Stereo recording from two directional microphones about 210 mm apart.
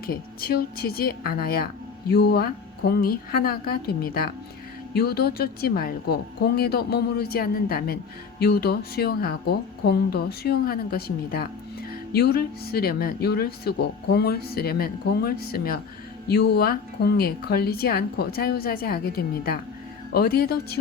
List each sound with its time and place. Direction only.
0.0 s speech: 45° left (ahead or behind)